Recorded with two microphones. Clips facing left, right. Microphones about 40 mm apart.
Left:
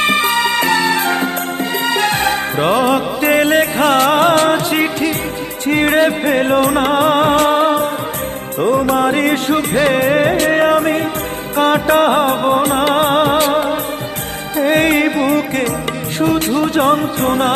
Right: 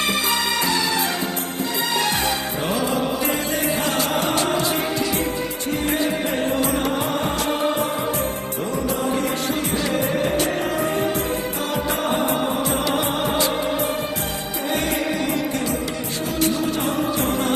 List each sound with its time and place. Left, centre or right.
0.0 s music: left